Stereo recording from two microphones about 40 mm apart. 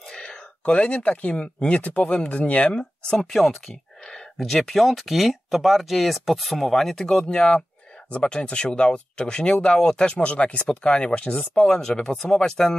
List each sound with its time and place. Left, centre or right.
0.1 s a sound: centre
0.7 s speech: left
3.2 s speech: centre